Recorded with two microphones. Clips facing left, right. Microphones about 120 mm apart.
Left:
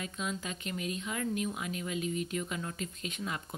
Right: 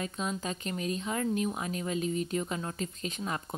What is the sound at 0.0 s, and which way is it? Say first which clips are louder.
Speech: right 3 dB; 35° right (ahead or behind).